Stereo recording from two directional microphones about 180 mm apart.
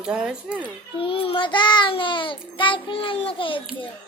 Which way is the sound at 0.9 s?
30° left (ahead or behind).